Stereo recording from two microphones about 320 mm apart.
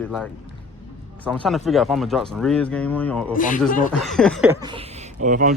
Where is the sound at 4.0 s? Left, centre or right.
Centre; by 5.5 s right.